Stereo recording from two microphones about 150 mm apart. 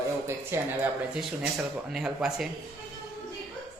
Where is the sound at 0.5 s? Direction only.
15° right (ahead or behind).